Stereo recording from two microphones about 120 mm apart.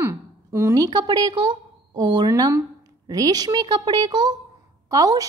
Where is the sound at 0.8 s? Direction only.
35° right (ahead or behind).